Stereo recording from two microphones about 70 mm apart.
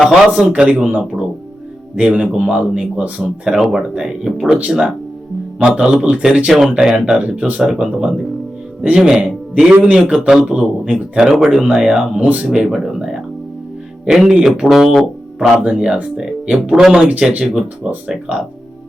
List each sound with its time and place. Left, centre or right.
0.0 s speech: centre
2.0 s a man's voice: centre
12.5 s speech: centre
15.4 s speech: centre